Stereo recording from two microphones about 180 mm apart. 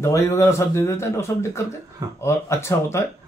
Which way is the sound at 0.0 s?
15° left (ahead or behind).